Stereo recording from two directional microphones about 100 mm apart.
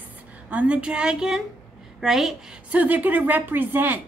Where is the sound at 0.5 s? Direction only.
10° right (ahead or behind).